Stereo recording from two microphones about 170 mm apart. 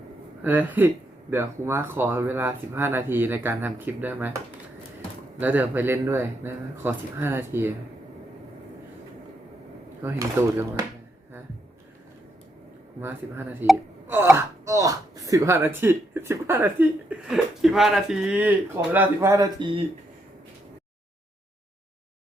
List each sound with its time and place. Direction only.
0.4 s speech: 10° right (ahead or behind)
5.4 s speech: 10° right (ahead or behind)
10.0 s speech: 15° right (ahead or behind)
13.0 s speech: 10° right (ahead or behind)
17.1 s speech: 5° right (ahead or behind); by 19.8 s 30° right (ahead or behind)